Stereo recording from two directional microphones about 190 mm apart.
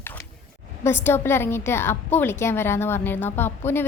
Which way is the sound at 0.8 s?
10° left (ahead or behind).